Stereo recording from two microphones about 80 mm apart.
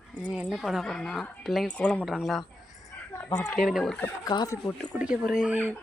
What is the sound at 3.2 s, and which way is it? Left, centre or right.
Speech, left.